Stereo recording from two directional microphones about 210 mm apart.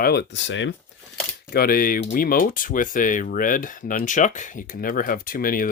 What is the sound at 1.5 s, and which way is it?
Speech, 45° left (ahead or behind).